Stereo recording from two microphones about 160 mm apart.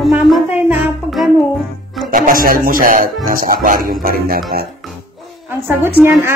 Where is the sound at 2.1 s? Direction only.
60° right (ahead or behind).